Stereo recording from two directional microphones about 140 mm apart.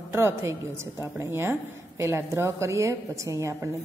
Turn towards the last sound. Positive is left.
turn(degrees=-20)  # may be behind; listen again after turning